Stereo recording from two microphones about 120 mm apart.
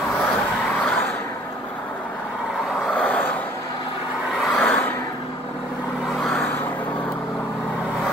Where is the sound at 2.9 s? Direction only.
10° left (ahead or behind).